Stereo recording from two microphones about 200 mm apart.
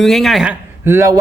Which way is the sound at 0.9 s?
15° right (ahead or behind).